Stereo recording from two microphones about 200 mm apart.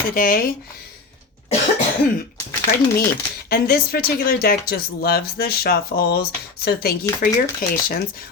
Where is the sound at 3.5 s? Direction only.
50° left (ahead or behind).